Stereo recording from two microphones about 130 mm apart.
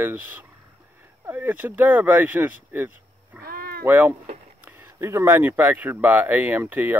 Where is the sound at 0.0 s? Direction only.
15° right (ahead or behind).